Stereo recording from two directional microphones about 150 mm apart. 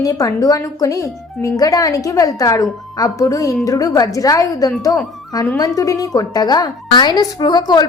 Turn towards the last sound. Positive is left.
turn(degrees=30)  # may be behind; listen again after turning